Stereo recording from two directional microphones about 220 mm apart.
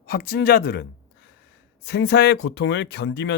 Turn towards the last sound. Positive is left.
turn(degrees=50)  # may be behind; listen again after turning